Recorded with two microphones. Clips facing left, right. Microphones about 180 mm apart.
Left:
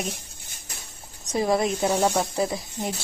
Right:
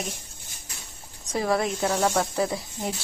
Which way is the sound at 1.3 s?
15° left (ahead or behind).